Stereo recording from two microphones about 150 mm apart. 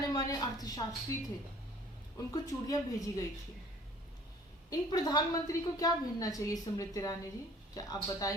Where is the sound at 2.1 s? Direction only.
25° left (ahead or behind).